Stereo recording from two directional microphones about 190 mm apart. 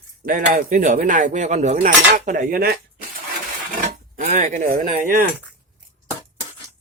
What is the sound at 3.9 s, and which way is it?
Speech, 40° right (ahead or behind).